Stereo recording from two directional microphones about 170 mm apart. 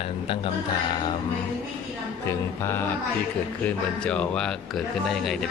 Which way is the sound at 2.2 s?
15° left (ahead or behind).